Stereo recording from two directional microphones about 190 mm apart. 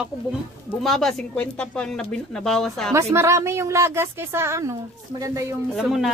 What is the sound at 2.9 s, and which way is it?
A woman's voice, 15° right (ahead or behind).